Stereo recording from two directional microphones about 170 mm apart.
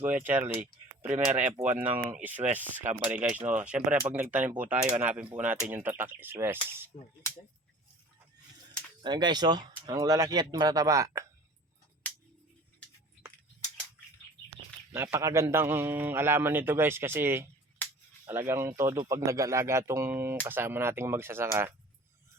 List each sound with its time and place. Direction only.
0.0 s a man's voice: 10° right (ahead or behind)
1.3 s speech: 45° right (ahead or behind)
1.6 s a man's voice: 10° right (ahead or behind)
9.0 s speech: 25° right (ahead or behind)
14.9 s a man's voice: 15° right (ahead or behind)